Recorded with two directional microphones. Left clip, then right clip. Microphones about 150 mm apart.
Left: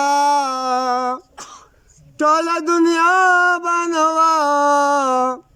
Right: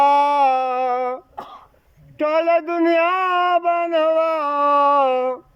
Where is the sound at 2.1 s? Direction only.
50° left (ahead or behind).